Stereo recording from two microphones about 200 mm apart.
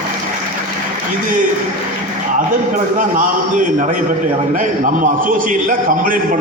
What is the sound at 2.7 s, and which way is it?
A man's voice, 40° right (ahead or behind).